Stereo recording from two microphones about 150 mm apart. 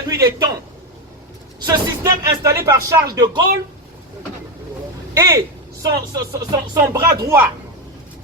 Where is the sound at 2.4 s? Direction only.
20° right (ahead or behind).